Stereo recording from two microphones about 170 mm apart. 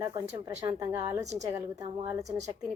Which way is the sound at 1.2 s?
40° right (ahead or behind).